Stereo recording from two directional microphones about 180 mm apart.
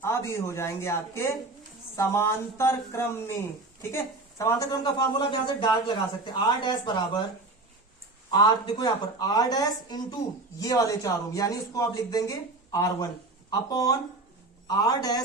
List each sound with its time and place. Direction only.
0.0 s a woman's voice: 15° left (ahead or behind)
8.3 s a woman's voice: 25° left (ahead or behind)